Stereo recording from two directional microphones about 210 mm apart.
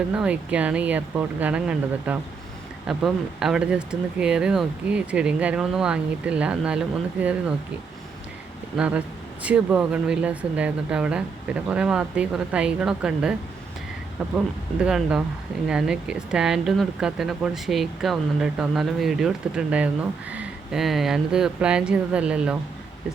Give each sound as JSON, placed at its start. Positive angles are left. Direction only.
{"t": 0.1, "sound": "speech", "side_deg": -5}
{"t": 8.8, "sound": "speech", "side_deg": -5}
{"t": 14.3, "sound": "speech", "side_deg": -5}